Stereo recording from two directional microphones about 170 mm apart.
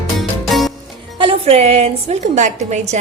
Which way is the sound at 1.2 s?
35° right (ahead or behind).